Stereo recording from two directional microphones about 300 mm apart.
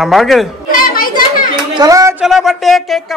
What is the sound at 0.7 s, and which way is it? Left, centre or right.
Children playing, left.